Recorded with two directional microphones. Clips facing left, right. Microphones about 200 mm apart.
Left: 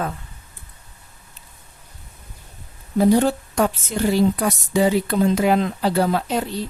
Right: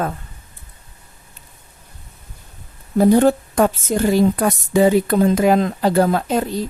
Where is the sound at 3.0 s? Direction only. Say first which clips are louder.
Right 3 dB; 50° right (ahead or behind).